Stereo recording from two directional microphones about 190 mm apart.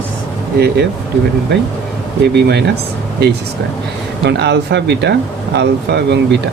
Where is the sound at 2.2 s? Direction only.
60° right (ahead or behind).